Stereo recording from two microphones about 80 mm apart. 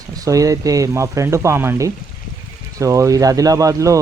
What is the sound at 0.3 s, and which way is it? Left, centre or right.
Speech, right.